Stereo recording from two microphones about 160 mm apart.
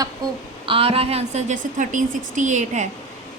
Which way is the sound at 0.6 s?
35° right (ahead or behind).